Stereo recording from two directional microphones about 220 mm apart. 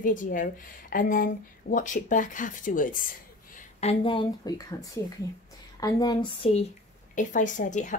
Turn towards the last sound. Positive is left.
turn(degrees=35)  # may be behind; listen again after turning